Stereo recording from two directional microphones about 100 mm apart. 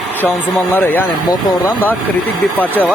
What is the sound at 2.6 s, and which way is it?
Speech, 15° left (ahead or behind).